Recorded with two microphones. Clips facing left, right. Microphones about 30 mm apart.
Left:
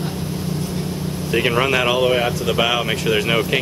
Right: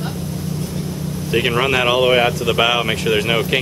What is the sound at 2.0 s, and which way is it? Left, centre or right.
Speech, right.